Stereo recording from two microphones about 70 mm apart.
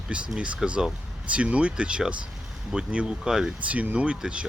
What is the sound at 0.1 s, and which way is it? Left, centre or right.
Speech, centre.